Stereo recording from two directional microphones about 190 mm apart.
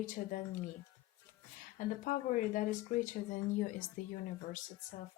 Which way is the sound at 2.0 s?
40° left (ahead or behind).